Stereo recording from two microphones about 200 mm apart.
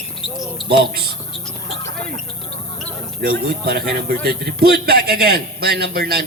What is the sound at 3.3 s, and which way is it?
A man's voice, 50° right (ahead or behind).